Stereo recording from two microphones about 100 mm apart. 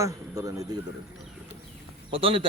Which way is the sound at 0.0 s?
30° right (ahead or behind).